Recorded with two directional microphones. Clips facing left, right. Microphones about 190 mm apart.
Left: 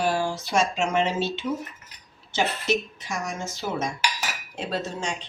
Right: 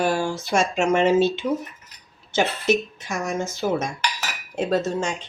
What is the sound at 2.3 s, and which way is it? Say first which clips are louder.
Speech: right 4 dB; 50° right (ahead or behind).